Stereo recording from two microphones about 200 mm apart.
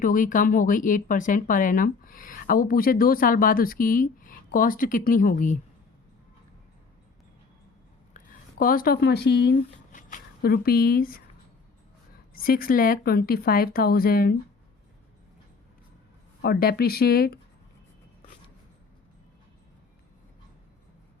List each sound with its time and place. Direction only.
0.0 s speech: 40° left (ahead or behind)
8.1 s speech: 45° left (ahead or behind)
9.9 s speech: 45° left (ahead or behind)
12.3 s speech: 45° left (ahead or behind)
16.4 s speech: 50° left (ahead or behind)